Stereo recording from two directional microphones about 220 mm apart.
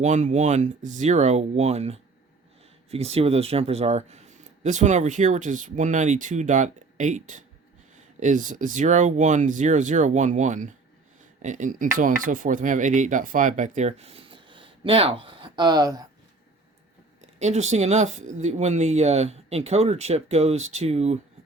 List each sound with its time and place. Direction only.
0.0 s speech: 30° right (ahead or behind); by 16.0 s 15° right (ahead or behind)
17.2 s speech: 30° right (ahead or behind)